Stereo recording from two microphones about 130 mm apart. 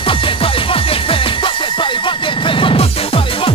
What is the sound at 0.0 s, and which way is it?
Music, 40° left (ahead or behind).